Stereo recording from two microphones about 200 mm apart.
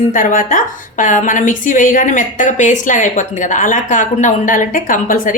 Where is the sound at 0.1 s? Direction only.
40° left (ahead or behind).